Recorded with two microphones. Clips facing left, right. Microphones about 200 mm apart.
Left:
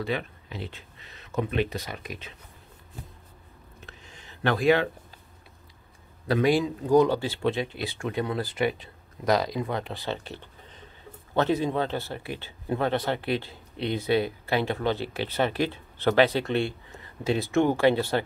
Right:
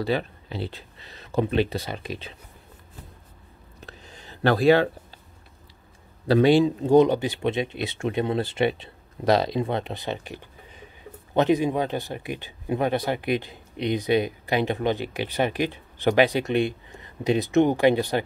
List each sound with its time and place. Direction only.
0.0 s speech: 35° right (ahead or behind)
3.8 s a sound: 35° right (ahead or behind)
6.2 s speech: 30° right (ahead or behind)